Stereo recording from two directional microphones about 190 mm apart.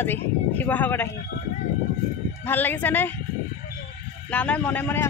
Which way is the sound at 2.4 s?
10° left (ahead or behind).